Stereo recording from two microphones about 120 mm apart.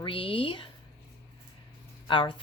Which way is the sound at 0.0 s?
45° left (ahead or behind).